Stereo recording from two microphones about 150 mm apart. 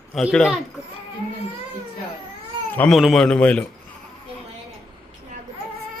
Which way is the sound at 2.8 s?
Centre (ahead or behind).